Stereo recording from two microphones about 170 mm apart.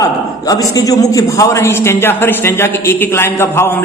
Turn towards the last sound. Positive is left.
turn(degrees=15)  # may be behind; listen again after turning